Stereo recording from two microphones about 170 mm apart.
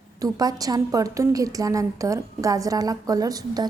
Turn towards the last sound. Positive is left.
turn(degrees=-25)  # may be behind; listen again after turning